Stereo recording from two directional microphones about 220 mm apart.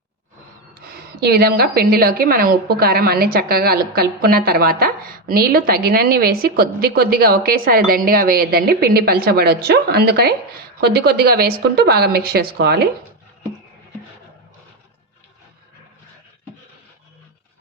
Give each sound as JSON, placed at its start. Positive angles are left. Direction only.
{"t": 1.2, "sound": "a woman's voice", "side_deg": -45}